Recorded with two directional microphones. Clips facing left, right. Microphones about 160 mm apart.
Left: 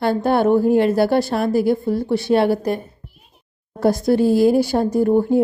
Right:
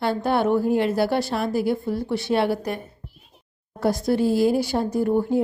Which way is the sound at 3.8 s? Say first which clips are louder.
Left 5 dB; 40° left (ahead or behind).